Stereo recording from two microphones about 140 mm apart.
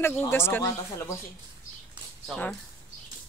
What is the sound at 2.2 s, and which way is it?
Speech, 10° left (ahead or behind).